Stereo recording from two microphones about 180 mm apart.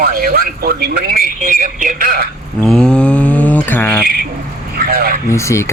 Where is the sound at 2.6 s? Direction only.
5° left (ahead or behind).